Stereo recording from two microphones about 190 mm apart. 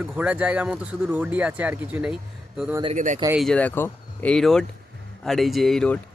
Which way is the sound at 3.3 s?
Centre (ahead or behind).